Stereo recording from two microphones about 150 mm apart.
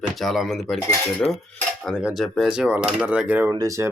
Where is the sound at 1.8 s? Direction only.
5° right (ahead or behind).